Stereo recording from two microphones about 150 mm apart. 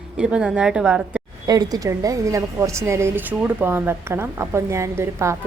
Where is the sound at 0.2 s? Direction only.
5° right (ahead or behind).